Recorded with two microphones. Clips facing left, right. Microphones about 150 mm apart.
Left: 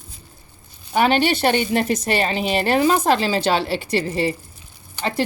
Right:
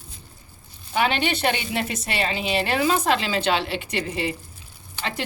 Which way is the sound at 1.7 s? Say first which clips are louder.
Left 7 dB; 45° left (ahead or behind).